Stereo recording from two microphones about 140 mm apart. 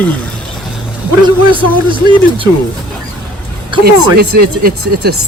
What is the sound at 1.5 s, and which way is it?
Speech, 35° right (ahead or behind).